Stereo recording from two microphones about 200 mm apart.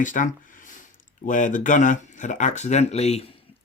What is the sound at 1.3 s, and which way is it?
Speech, 40° left (ahead or behind).